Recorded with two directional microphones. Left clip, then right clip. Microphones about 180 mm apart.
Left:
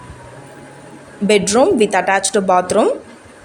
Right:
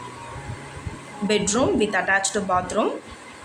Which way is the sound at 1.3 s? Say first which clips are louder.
Left 9 dB; 40° left (ahead or behind).